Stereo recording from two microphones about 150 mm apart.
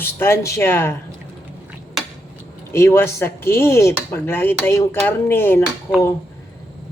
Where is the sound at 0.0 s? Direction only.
15° left (ahead or behind).